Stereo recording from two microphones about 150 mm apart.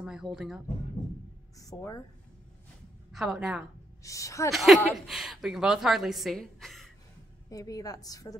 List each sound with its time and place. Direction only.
0.0 s a woman's voice: 5° right (ahead or behind)
1.6 s a woman's voice: 20° left (ahead or behind)
3.1 s a woman's voice: centre (ahead or behind)
4.0 s a woman's voice: 20° left (ahead or behind)
4.5 s a woman's voice: centre (ahead or behind)
7.4 s a woman's voice: 25° left (ahead or behind)